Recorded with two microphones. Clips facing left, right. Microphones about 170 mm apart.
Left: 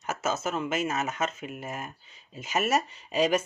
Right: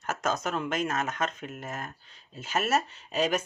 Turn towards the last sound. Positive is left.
turn(degrees=10)  # may be behind; listen again after turning